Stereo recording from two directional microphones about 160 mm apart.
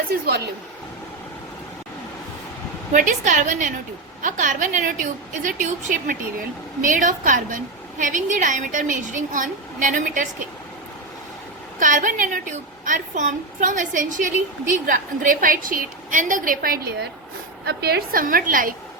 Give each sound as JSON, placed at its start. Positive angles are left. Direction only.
{"t": 2.9, "sound": "a woman's voice", "side_deg": -50}
{"t": 11.8, "sound": "a woman's voice", "side_deg": -55}